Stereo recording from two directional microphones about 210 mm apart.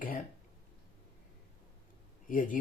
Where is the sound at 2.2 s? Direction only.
40° left (ahead or behind).